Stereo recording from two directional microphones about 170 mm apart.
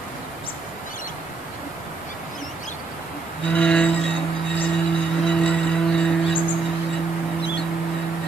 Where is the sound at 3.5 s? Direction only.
5° left (ahead or behind).